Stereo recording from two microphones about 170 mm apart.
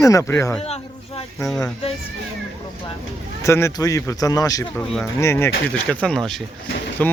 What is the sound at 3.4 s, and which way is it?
Speech, 15° left (ahead or behind).